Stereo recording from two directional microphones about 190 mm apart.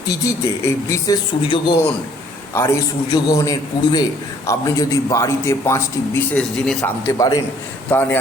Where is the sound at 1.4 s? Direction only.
25° left (ahead or behind).